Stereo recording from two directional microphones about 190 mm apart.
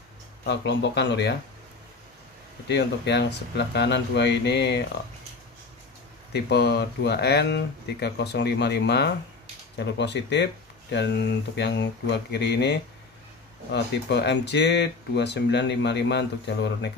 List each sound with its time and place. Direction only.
0.5 s speech: 65° left (ahead or behind)
2.7 s speech: 65° left (ahead or behind)
6.3 s speech: 60° left (ahead or behind)